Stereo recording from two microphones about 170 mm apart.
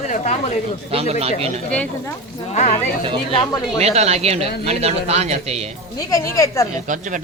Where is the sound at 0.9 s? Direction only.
35° right (ahead or behind).